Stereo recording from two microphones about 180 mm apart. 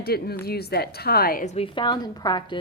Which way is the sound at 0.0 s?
60° left (ahead or behind).